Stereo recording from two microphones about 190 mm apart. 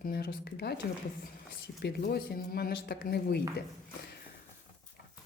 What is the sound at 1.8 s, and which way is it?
Speech, 55° left (ahead or behind).